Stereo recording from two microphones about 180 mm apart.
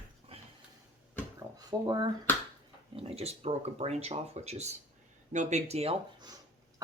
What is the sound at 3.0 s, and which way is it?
Speech, 35° right (ahead or behind).